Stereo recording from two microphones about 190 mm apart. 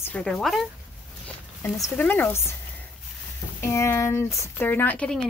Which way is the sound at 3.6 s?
15° left (ahead or behind).